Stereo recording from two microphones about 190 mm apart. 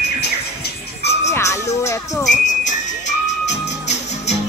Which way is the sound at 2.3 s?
40° left (ahead or behind).